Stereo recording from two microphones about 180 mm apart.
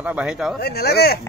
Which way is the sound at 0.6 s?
60° left (ahead or behind).